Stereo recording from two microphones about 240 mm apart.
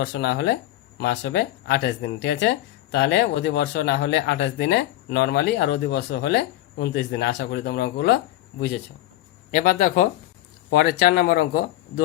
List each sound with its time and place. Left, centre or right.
0.0 s speech: left